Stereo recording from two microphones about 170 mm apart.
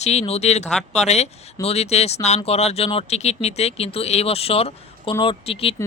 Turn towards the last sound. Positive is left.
turn(degrees=35)  # may be behind; listen again after turning